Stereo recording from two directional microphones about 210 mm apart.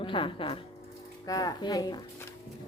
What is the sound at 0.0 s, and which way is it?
A woman's voice, 25° left (ahead or behind).